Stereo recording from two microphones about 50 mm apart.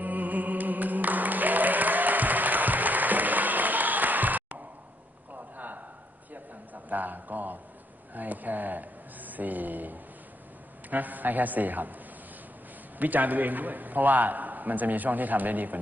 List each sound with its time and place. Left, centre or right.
0.0 s music: right
5.3 s a sound: right
10.8 s a man's voice: right
13.0 s a man's voice: right